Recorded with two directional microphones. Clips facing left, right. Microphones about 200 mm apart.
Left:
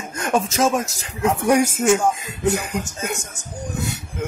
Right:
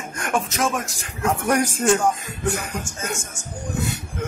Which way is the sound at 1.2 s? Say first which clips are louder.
Left 4 dB; 15° left (ahead or behind).